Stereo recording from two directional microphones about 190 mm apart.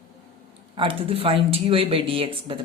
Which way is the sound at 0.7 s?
30° right (ahead or behind).